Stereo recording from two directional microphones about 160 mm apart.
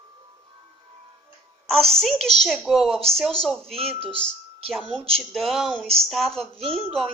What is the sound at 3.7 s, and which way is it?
Speech, 40° right (ahead or behind).